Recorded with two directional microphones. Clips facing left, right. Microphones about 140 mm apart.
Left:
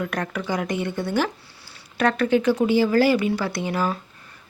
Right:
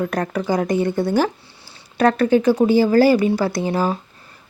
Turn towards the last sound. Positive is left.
turn(degrees=-35)  # may be behind; listen again after turning